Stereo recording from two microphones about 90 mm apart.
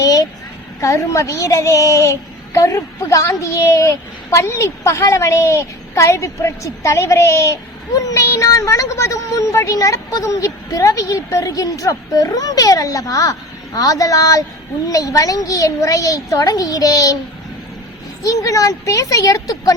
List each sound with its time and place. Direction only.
0.0 s a woman's voice: 40° left (ahead or behind)
18.2 s a child's voice: 40° left (ahead or behind)